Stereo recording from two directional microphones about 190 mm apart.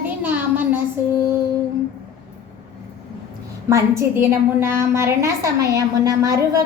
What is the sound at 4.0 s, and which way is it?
A woman's voice, 15° right (ahead or behind).